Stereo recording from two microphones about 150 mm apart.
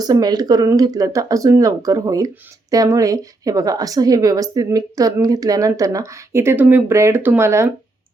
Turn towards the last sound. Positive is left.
turn(degrees=-15)  # may be behind; listen again after turning